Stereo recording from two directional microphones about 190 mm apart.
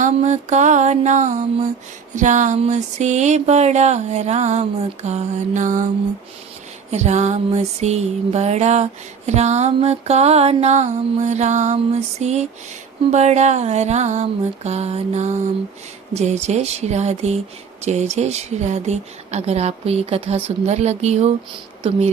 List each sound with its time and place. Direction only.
0.0 s music: 40° right (ahead or behind)
6.9 s music: 35° right (ahead or behind)